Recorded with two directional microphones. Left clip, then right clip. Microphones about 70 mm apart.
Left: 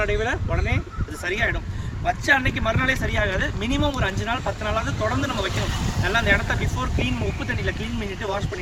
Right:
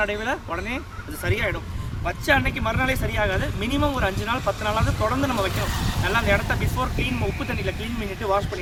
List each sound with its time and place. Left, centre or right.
0.0 s speech: right